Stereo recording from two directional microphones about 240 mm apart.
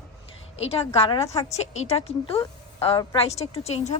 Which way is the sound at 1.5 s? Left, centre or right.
Left.